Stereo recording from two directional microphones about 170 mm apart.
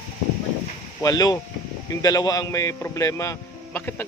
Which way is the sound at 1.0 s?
20° left (ahead or behind).